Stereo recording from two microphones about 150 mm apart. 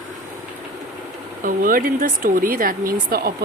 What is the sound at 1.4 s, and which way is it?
Speech, 65° right (ahead or behind).